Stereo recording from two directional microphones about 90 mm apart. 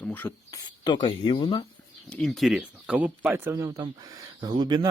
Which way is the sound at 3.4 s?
35° right (ahead or behind).